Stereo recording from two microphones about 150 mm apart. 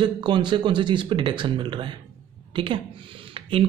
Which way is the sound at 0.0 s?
30° right (ahead or behind).